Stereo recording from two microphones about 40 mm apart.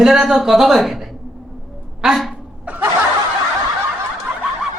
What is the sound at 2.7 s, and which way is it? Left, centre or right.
Snicker, right.